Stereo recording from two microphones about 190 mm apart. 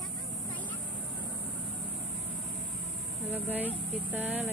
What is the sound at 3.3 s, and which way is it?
Speech, 10° right (ahead or behind).